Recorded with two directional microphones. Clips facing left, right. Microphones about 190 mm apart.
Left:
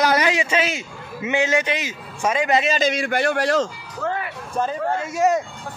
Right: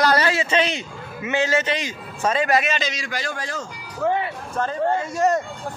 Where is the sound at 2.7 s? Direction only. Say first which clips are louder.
Left 7 dB; 50° left (ahead or behind); by 3.6 s 70° left (ahead or behind).